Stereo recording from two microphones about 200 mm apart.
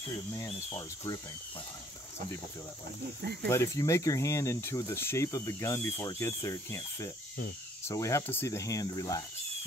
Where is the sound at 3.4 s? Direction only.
15° left (ahead or behind).